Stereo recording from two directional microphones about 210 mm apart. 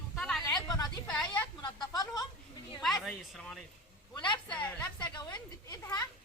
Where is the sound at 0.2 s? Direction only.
5° left (ahead or behind).